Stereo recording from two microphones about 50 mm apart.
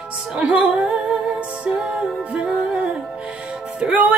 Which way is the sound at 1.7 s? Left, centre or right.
Centre.